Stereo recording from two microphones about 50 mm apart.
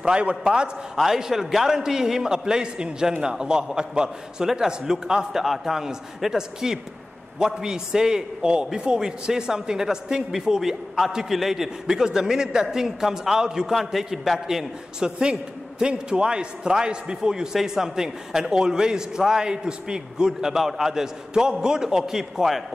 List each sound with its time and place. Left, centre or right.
0.0 s a man's voice: right
0.9 s a man's voice: centre